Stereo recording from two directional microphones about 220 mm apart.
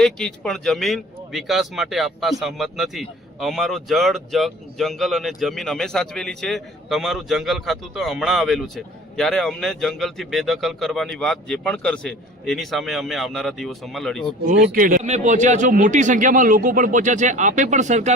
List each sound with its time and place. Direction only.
0.0 s speech: 5° left (ahead or behind)
14.5 s a man's voice: 40° right (ahead or behind)